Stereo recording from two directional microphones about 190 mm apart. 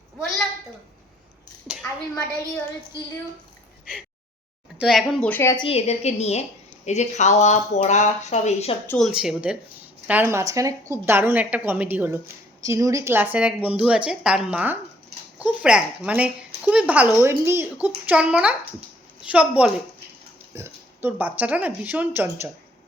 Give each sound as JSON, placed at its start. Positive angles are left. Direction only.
{"t": 4.8, "sound": "speech", "side_deg": 0}
{"t": 5.5, "sound": "speech", "side_deg": 30}
{"t": 8.9, "sound": "speech", "side_deg": 0}